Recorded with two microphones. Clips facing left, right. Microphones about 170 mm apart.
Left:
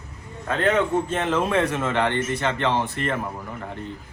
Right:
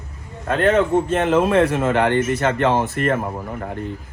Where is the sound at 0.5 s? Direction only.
30° right (ahead or behind).